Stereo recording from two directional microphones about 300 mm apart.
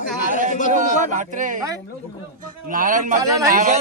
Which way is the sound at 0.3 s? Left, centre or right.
Right.